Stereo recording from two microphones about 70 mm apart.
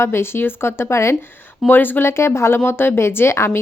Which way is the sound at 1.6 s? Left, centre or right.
Left.